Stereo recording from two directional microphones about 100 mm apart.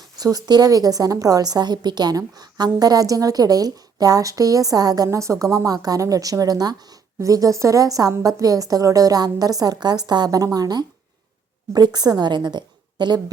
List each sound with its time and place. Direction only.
0.2 s a woman's voice: 40° right (ahead or behind)